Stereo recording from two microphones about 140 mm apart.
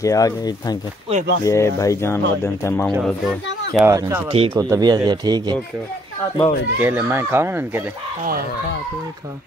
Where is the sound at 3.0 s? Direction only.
5° left (ahead or behind).